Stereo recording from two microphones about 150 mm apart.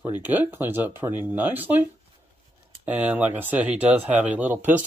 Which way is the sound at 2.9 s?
10° right (ahead or behind).